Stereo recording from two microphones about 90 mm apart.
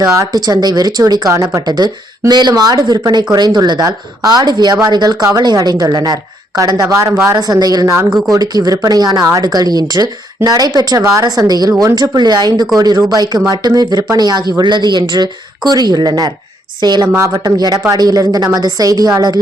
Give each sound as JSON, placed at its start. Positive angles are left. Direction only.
{"t": 0.1, "sound": "speech", "side_deg": -40}
{"t": 17.2, "sound": "speech", "side_deg": -35}
{"t": 17.9, "sound": "speech", "side_deg": -45}